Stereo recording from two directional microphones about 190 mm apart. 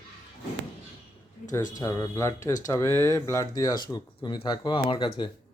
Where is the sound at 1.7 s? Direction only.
15° left (ahead or behind).